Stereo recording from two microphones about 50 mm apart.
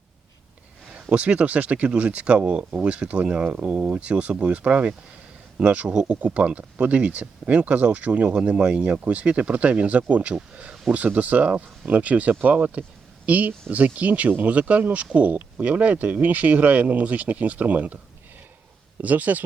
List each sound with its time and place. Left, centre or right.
1.1 s speech: right
19.0 s speech: right